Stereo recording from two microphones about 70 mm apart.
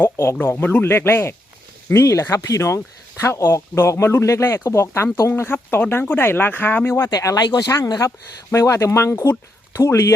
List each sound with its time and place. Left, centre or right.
0.0 s speech: left
0.4 s speech: left
5.4 s speech: left
7.0 s speech: left
7.9 s speech: left